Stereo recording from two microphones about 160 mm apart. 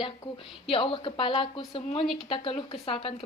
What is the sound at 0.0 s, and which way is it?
A woman's voice, 35° left (ahead or behind).